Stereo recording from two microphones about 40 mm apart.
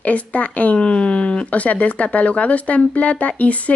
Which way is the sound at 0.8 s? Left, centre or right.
Left.